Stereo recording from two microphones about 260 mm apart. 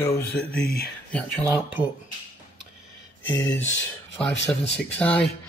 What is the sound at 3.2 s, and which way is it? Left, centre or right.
Speech, centre.